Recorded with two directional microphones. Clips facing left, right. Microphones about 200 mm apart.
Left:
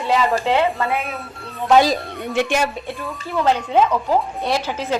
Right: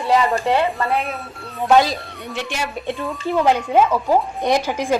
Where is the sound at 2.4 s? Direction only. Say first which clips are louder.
Left 7 dB; 50° left (ahead or behind).